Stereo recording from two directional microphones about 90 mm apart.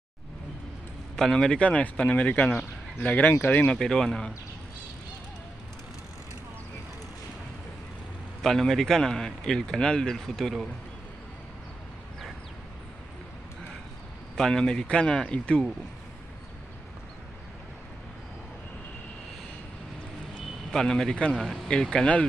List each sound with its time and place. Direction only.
1.1 s speech: 5° left (ahead or behind)
3.7 s speech: 5° left (ahead or behind)
8.4 s speech: 5° left (ahead or behind)
14.3 s speech: 5° left (ahead or behind)
20.7 s speech: 5° left (ahead or behind)